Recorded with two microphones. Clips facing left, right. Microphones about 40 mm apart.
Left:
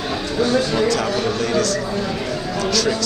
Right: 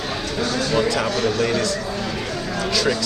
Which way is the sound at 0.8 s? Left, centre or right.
Centre.